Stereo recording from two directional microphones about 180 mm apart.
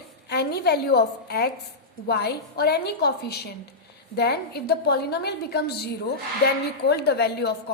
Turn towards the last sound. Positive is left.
turn(degrees=65)  # may be behind; listen again after turning